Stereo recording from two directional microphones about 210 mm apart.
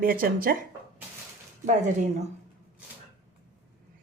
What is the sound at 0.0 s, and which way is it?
Speech, 45° right (ahead or behind).